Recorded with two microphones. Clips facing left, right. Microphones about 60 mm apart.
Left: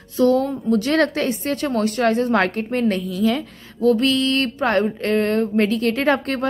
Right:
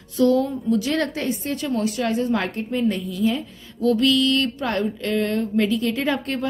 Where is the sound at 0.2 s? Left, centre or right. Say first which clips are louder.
Left 1 dB; left.